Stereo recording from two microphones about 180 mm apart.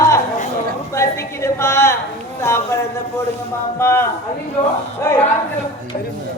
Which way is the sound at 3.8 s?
10° left (ahead or behind).